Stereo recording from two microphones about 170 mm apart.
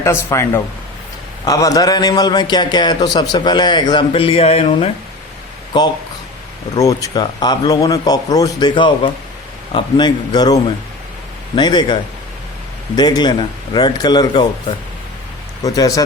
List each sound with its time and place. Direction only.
0.0 s a man's voice: 15° left (ahead or behind); by 4.9 s 35° left (ahead or behind)
6.7 s a man's voice: 20° left (ahead or behind)
15.6 s a man's voice: 20° left (ahead or behind)